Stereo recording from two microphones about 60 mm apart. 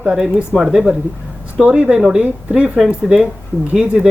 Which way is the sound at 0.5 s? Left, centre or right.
Centre.